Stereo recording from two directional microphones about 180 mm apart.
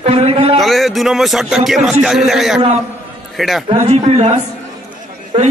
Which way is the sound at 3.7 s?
35° right (ahead or behind).